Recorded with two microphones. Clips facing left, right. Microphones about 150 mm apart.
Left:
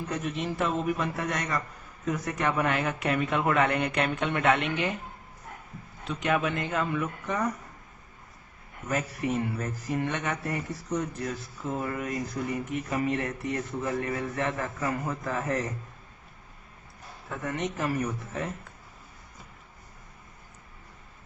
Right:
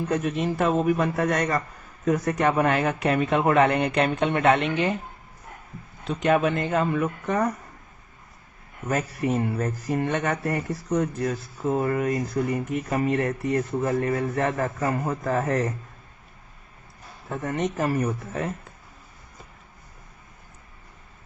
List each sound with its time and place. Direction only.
0.1 s speech: 55° right (ahead or behind); by 4.9 s 35° right (ahead or behind)
6.1 s speech: 35° right (ahead or behind)
8.9 s speech: 45° right (ahead or behind)
17.2 s speech: 35° right (ahead or behind)